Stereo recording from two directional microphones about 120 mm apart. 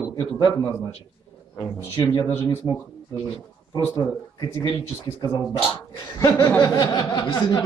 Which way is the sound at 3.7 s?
30° left (ahead or behind).